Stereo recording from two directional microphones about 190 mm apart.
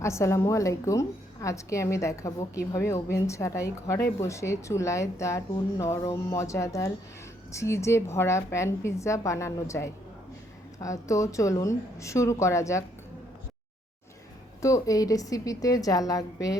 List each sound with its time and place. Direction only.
0.0 s speech: 15° left (ahead or behind)
14.6 s a woman's voice: 15° left (ahead or behind)